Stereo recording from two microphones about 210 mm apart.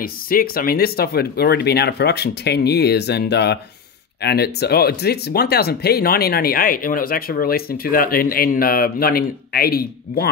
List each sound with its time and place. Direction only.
0.0 s speech: 45° left (ahead or behind)